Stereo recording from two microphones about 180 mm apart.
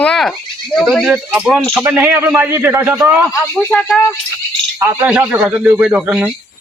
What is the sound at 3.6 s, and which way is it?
Speech, 10° left (ahead or behind).